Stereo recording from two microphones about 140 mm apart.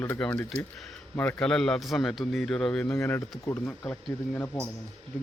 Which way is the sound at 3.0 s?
20° left (ahead or behind).